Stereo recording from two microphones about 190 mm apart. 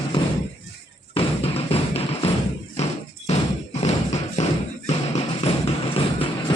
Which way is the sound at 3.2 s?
35° left (ahead or behind).